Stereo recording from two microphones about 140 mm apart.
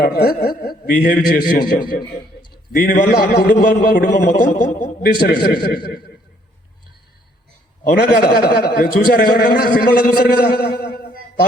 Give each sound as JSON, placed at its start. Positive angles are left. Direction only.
{"t": 0.0, "sound": "a man's voice", "side_deg": 90}
{"t": 1.8, "sound": "a man's voice", "side_deg": 35}
{"t": 2.5, "sound": "a man's voice", "side_deg": 90}
{"t": 5.2, "sound": "a man's voice", "side_deg": 90}
{"t": 8.1, "sound": "a man's voice", "side_deg": 90}